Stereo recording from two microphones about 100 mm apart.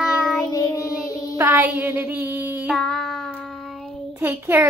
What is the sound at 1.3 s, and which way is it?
Speech, 25° right (ahead or behind).